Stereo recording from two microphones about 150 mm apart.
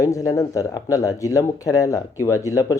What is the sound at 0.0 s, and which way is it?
Speech, 20° left (ahead or behind).